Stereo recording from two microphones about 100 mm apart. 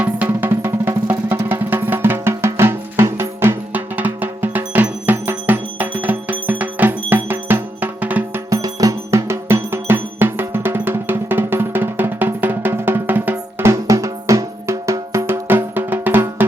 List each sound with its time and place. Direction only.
0.3 s music: 20° right (ahead or behind)
8.4 s music: 35° right (ahead or behind); by 16.5 s 20° right (ahead or behind)